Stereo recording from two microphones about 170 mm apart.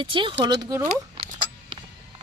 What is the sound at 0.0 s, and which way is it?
Speech, 30° right (ahead or behind).